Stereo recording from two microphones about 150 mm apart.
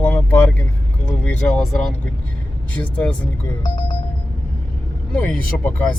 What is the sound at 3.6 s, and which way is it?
Speech, 30° left (ahead or behind).